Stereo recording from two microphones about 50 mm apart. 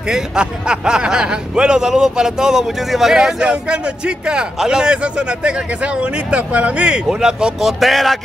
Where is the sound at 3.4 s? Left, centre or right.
Centre.